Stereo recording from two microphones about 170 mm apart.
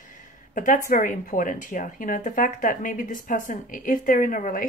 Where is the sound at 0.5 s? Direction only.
50° left (ahead or behind).